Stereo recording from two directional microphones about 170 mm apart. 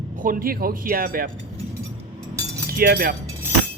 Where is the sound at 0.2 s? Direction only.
55° right (ahead or behind).